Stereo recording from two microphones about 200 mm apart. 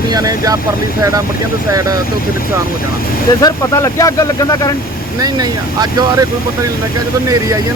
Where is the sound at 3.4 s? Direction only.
15° left (ahead or behind).